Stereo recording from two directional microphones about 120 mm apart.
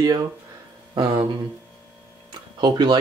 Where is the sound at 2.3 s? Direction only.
40° right (ahead or behind).